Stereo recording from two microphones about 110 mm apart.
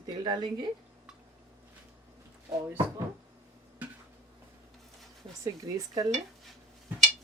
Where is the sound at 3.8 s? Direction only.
15° right (ahead or behind).